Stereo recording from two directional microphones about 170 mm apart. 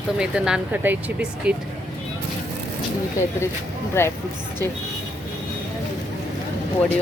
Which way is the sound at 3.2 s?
15° left (ahead or behind).